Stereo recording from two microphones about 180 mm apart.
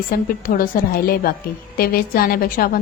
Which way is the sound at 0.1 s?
50° left (ahead or behind).